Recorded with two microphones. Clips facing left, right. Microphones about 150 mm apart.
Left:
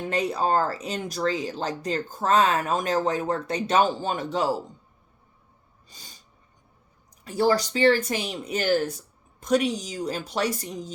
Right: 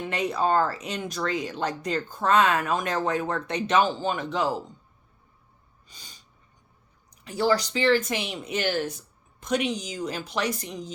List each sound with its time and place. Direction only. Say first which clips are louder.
0.1 s speech: left 1 dB; 35° left (ahead or behind)
5.9 s snort: left 1 dB; 45° left (ahead or behind)
7.3 s speech: left 2 dB; 45° left (ahead or behind)